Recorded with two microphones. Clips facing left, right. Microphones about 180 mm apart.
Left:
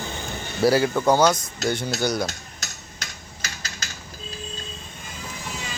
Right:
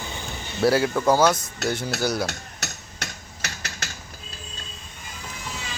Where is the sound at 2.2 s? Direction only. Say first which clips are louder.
Right 1 dB; 65° right (ahead or behind).